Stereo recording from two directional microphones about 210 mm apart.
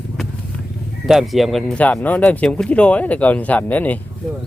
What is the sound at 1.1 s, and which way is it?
Speech, centre (ahead or behind).